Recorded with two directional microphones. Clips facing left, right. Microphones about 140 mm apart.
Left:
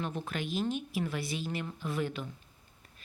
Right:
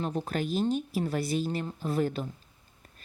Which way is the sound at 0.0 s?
35° right (ahead or behind).